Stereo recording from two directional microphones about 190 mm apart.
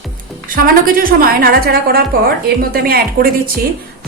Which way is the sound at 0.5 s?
50° right (ahead or behind).